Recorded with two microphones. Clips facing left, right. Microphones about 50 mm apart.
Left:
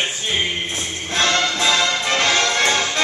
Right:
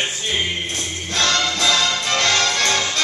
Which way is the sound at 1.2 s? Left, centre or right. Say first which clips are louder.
Left 1 dB; left.